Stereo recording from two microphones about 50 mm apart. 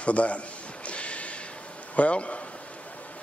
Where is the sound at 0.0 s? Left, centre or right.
Left.